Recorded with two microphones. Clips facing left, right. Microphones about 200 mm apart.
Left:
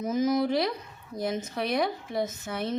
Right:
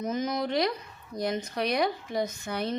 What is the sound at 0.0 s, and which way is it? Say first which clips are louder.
Speech: left 4 dB; 5° left (ahead or behind).